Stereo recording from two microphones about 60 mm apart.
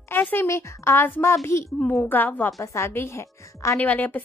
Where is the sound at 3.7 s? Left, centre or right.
Left.